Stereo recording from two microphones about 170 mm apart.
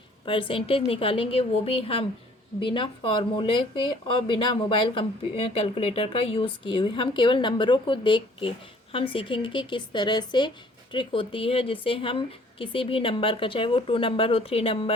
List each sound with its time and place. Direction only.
0.3 s a woman's voice: 30° left (ahead or behind)